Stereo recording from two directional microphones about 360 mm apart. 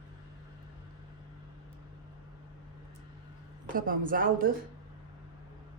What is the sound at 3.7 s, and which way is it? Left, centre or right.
Speech, right.